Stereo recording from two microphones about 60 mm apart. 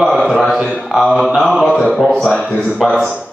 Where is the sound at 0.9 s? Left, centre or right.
Centre.